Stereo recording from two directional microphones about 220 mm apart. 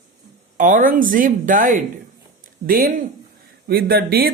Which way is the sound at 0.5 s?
35° right (ahead or behind).